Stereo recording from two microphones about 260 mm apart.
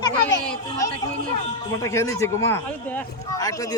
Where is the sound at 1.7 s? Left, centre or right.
Centre.